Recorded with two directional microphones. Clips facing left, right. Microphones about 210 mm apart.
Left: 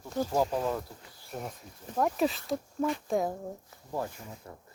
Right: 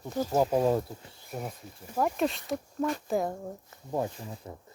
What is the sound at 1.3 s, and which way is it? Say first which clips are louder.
Speech: right 2 dB; 5° right (ahead or behind).